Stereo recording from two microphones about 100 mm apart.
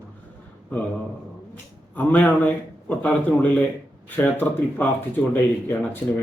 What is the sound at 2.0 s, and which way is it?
Speech, 15° left (ahead or behind).